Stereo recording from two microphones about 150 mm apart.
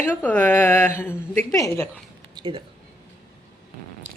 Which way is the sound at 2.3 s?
35° right (ahead or behind).